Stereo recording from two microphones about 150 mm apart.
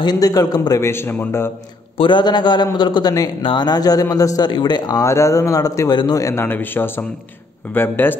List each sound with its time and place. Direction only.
0.0 s a man's voice: 25° left (ahead or behind)
2.0 s a man's voice: 30° left (ahead or behind); by 8.2 s 15° left (ahead or behind)